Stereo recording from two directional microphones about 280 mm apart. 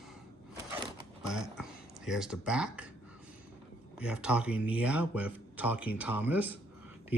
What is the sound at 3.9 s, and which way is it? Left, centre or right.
Speech, centre.